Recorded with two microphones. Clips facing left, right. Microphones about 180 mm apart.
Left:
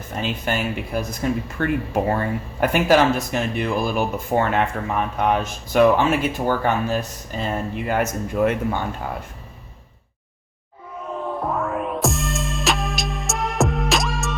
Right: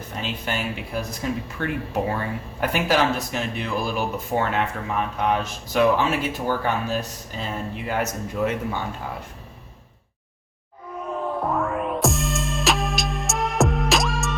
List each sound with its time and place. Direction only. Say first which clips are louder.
0.1 s speech: left 5 dB; 50° left (ahead or behind)
11.4 s music: left 1 dB; centre (ahead or behind)